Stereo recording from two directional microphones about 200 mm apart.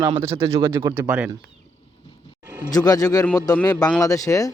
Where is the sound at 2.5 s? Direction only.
15° right (ahead or behind).